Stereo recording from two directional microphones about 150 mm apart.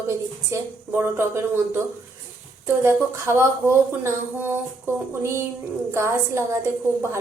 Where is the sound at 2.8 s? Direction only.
15° right (ahead or behind).